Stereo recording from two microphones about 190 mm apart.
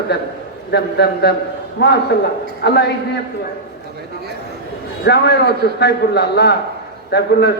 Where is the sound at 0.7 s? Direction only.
60° left (ahead or behind).